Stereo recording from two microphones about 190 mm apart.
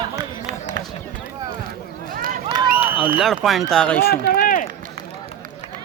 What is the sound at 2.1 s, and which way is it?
Run, 45° right (ahead or behind).